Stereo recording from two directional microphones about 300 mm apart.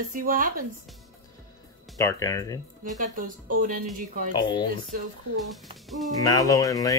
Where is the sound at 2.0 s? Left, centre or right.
Centre.